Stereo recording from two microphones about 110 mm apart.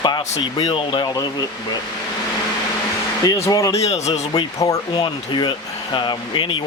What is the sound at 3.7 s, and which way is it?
Speech, 75° left (ahead or behind).